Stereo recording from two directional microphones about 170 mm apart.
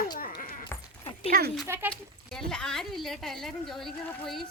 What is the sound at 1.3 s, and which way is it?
Speech, 60° right (ahead or behind).